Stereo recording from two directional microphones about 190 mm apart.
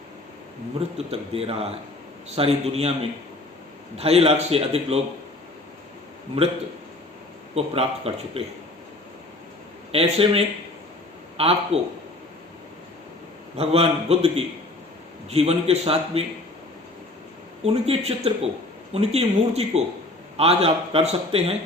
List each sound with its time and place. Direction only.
0.8 s a man's voice: 30° right (ahead or behind)
7.5 s a man's voice: 30° right (ahead or behind)
9.9 s a man's voice: 30° right (ahead or behind)
13.6 s a man's voice: 30° right (ahead or behind)
17.6 s a man's voice: 30° right (ahead or behind)